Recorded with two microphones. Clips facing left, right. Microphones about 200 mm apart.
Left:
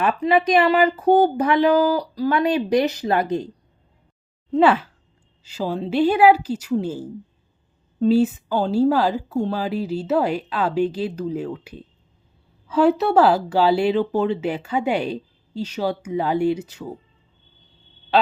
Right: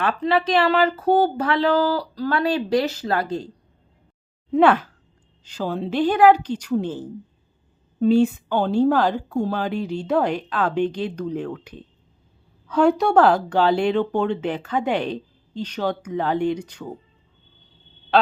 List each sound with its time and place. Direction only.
0.0 s speech: 15° left (ahead or behind)
4.5 s a woman's voice: 5° left (ahead or behind)